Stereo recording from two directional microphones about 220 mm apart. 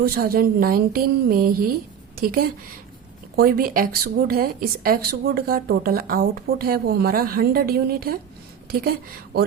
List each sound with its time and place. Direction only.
0.0 s speech: 45° right (ahead or behind)